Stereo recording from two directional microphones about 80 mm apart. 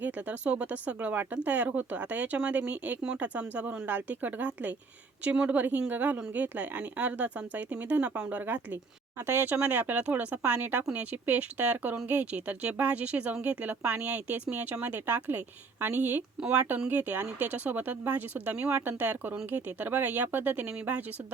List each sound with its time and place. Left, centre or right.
0.0 s speech: centre